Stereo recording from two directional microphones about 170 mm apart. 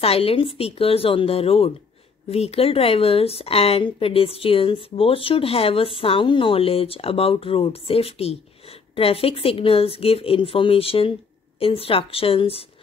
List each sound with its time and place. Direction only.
0.0 s speech: 35° left (ahead or behind)